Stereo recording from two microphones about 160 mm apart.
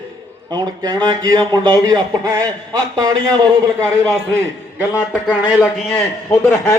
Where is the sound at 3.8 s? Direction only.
5° left (ahead or behind).